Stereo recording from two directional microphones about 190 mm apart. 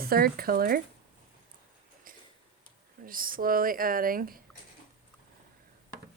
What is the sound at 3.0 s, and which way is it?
Speech, 50° right (ahead or behind).